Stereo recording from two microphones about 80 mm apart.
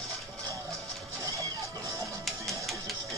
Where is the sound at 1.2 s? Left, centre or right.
Right.